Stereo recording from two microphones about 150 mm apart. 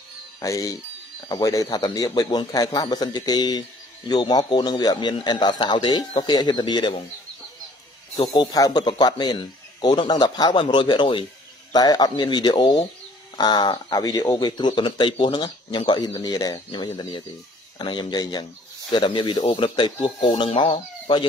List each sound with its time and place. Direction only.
0.4 s speech: 25° left (ahead or behind)
8.2 s speech: 30° left (ahead or behind)